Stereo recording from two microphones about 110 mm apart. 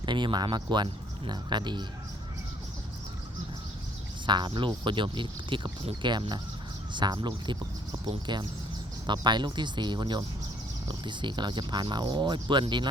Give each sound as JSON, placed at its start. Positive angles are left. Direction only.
{"t": 0.0, "sound": "speech", "side_deg": -45}
{"t": 4.3, "sound": "speech", "side_deg": -45}